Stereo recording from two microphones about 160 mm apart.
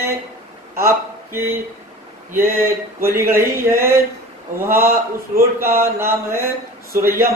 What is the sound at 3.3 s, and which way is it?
A man's voice, 15° right (ahead or behind).